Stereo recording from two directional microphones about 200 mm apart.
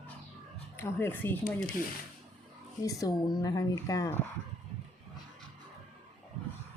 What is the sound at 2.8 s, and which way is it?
Speech, 15° left (ahead or behind).